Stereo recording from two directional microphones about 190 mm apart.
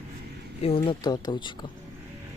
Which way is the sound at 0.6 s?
30° left (ahead or behind).